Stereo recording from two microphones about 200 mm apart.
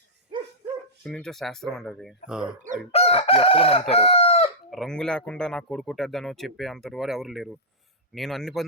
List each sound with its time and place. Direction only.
1.0 s a man's voice: 5° left (ahead or behind)
2.9 s chicken: 30° left (ahead or behind)
4.7 s a man's voice: centre (ahead or behind)